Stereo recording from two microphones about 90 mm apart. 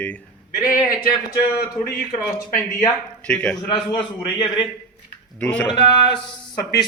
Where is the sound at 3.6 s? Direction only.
55° left (ahead or behind); by 4.6 s 75° left (ahead or behind).